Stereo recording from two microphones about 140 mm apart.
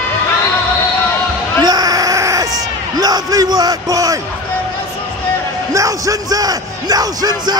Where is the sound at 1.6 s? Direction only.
30° right (ahead or behind).